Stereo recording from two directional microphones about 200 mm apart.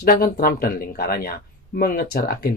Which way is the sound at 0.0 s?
50° left (ahead or behind).